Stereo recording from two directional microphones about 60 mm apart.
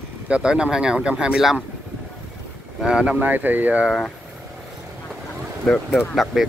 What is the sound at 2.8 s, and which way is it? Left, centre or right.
Speech, centre.